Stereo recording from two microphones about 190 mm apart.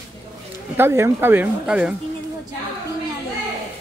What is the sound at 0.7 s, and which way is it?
Speech, 15° right (ahead or behind).